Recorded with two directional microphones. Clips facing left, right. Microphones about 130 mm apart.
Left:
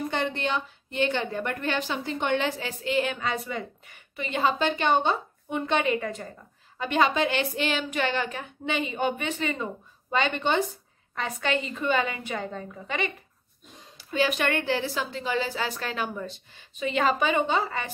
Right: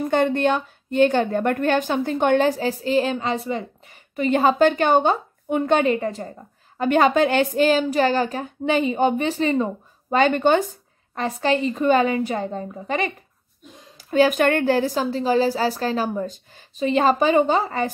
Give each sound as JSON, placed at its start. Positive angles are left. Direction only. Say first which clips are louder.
{"t": 0.1, "sound": "a woman's voice", "louder": "right 13 dB", "side_deg": -50}
{"t": 4.1, "sound": "a woman's voice", "louder": "right 8 dB", "side_deg": -45}
{"t": 5.9, "sound": "a woman's voice", "louder": "right 5 dB", "side_deg": -35}
{"t": 6.8, "sound": "a woman's voice", "louder": "right 7 dB", "side_deg": -45}
{"t": 11.1, "sound": "a woman's voice", "louder": "right 7 dB", "side_deg": -35}